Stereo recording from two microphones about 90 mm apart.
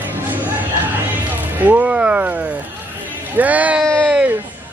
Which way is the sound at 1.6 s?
15° right (ahead or behind).